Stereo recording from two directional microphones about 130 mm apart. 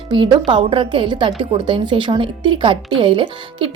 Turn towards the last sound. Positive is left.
turn(degrees=-40)  # may be behind; listen again after turning